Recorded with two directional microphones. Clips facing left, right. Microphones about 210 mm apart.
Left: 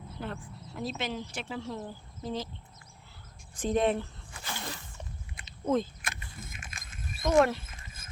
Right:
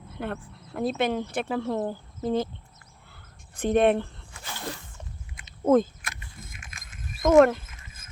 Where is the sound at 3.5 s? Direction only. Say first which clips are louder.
Right 6 dB; 60° right (ahead or behind).